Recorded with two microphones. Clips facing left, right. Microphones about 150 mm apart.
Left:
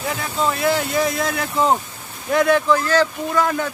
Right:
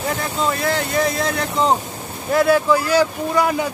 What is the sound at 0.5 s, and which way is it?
A man's voice, 5° left (ahead or behind).